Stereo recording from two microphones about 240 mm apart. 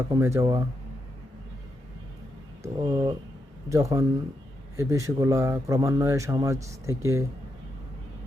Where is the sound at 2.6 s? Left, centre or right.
Centre.